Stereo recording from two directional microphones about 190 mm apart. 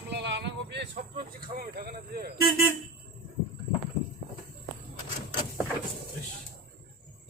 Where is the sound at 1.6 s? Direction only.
50° right (ahead or behind).